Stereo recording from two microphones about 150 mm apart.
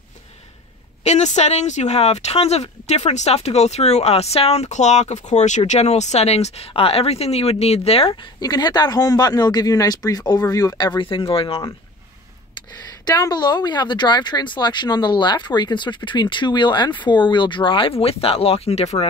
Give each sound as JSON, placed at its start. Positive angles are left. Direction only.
{"t": 1.0, "sound": "speech", "side_deg": 50}
{"t": 13.0, "sound": "speech", "side_deg": 25}